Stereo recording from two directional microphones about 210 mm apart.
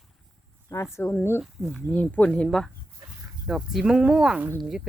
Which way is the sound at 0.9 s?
10° left (ahead or behind).